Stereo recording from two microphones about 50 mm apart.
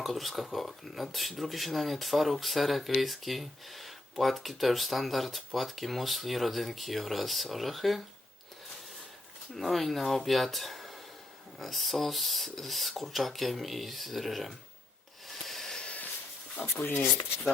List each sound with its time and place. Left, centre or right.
0.0 s speech: centre
9.6 s speech: centre
15.3 s a sound: centre
15.8 s hiss: left
16.8 s speech: left